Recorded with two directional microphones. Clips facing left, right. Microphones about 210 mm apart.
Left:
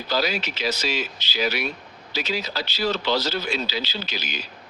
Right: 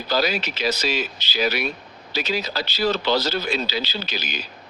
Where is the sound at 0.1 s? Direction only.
40° right (ahead or behind).